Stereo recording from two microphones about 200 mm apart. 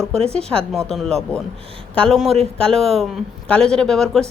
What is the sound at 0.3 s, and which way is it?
Speech, 5° left (ahead or behind).